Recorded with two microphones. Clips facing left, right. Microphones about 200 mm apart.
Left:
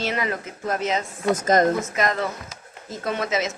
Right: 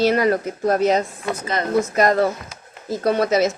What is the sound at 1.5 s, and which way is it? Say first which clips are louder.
Speech: left 7 dB; 45° left (ahead or behind).